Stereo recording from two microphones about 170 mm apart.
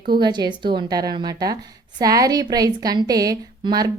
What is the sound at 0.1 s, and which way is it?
A woman's voice, 25° right (ahead or behind).